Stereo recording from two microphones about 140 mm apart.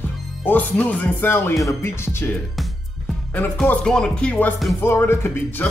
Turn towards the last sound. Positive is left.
turn(degrees=15)  # may be behind; listen again after turning